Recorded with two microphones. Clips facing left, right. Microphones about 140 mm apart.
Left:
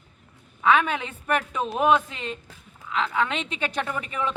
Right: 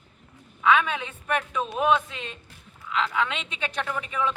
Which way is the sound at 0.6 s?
40° left (ahead or behind).